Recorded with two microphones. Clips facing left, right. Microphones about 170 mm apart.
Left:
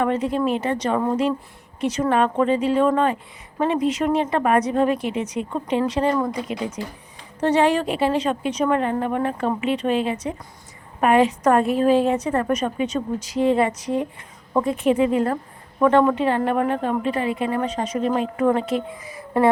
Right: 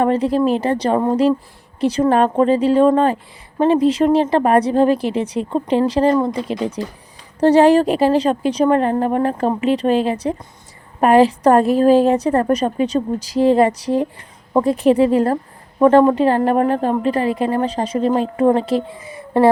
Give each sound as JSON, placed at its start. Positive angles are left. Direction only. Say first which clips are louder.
{"t": 0.0, "sound": "a woman's voice", "louder": "right 5 dB", "side_deg": -35}